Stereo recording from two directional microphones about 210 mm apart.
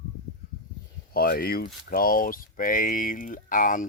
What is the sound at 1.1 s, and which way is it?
Speech, 45° left (ahead or behind).